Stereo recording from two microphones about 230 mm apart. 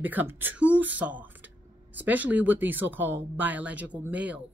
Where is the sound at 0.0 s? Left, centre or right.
Centre.